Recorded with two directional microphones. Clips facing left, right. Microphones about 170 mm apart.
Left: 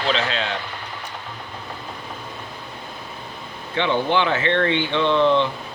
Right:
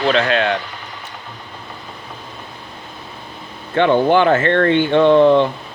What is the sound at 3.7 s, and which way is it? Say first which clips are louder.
Speech: right 7 dB; 50° right (ahead or behind).